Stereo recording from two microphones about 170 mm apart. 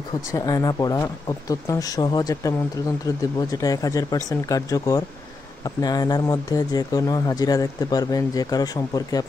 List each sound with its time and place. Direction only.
0.3 s speech: 20° left (ahead or behind)